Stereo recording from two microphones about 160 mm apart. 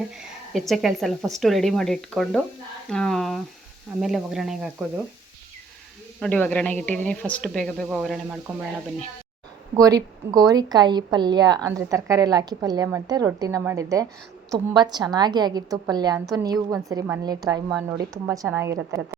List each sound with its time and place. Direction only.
0.5 s speech: centre (ahead or behind)
6.1 s a woman's voice: 10° left (ahead or behind)
9.7 s a woman's voice: 20° right (ahead or behind)